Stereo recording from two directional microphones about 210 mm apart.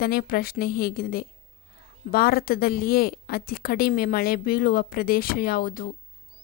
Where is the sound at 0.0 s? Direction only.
45° left (ahead or behind).